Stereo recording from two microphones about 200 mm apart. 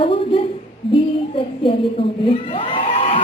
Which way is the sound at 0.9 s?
25° left (ahead or behind).